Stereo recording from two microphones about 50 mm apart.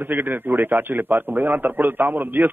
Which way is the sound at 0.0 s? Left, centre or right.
Right.